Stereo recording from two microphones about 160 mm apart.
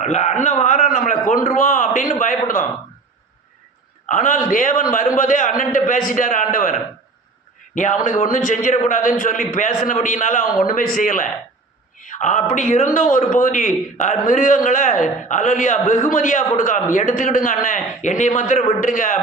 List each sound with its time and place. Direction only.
0.0 s a man's voice: 45° left (ahead or behind)
4.1 s a man's voice: 55° left (ahead or behind)
8.0 s a man's voice: 55° left (ahead or behind)